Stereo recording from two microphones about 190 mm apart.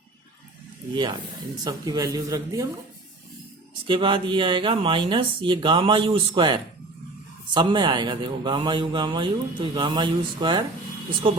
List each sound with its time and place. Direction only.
1.6 s speech: 20° right (ahead or behind)
3.8 s speech: 25° right (ahead or behind)